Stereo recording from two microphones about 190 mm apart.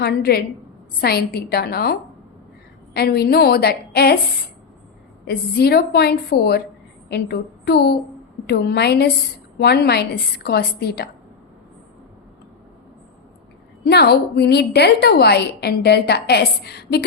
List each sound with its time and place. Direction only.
0.0 s a woman's voice: 55° left (ahead or behind)
5.2 s a woman's voice: 55° left (ahead or behind)
13.8 s a woman's voice: 60° left (ahead or behind)